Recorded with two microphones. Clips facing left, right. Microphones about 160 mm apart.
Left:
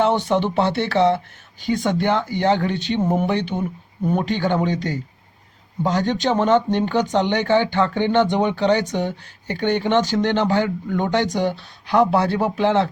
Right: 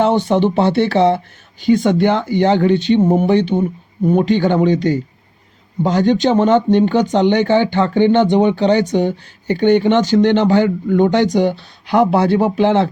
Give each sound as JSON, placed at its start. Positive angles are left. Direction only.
{"t": 0.0, "sound": "speech", "side_deg": -30}